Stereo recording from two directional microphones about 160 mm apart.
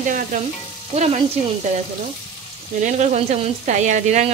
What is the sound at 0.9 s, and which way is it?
Speech, 45° right (ahead or behind).